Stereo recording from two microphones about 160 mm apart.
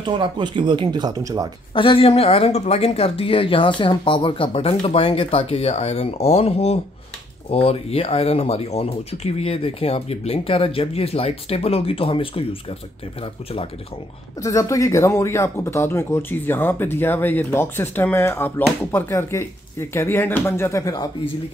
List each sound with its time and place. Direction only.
0.0 s speech: 30° right (ahead or behind)
1.7 s speech: 35° left (ahead or behind)
14.4 s speech: 20° left (ahead or behind)